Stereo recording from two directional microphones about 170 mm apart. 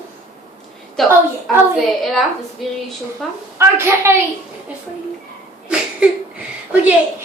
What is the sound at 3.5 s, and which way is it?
Speech, 15° right (ahead or behind).